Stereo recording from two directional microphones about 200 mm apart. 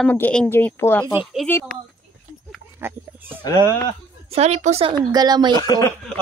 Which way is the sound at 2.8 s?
10° right (ahead or behind).